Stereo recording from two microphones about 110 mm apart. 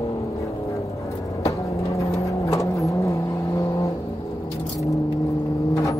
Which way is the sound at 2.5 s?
30° left (ahead or behind).